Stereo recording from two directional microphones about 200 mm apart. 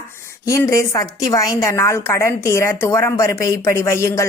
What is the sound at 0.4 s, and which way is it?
Speech, 15° left (ahead or behind).